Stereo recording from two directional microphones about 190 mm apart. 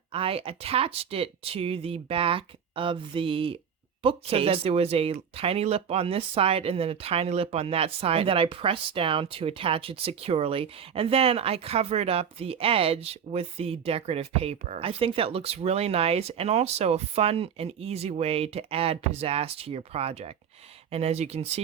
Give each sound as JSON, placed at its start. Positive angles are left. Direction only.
{"t": 0.1, "sound": "speech", "side_deg": -30}